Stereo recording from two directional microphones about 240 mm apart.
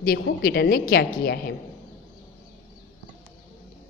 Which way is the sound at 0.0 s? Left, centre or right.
Left.